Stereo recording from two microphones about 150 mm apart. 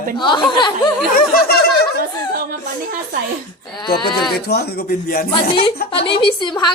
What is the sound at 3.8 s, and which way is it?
Speech, 30° left (ahead or behind).